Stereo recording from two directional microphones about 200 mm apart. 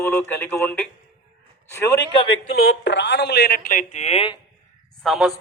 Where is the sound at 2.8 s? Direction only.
60° left (ahead or behind); by 4.4 s 30° left (ahead or behind).